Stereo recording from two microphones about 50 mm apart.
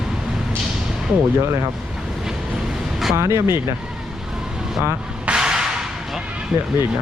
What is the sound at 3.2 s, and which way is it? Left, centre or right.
Speech, right.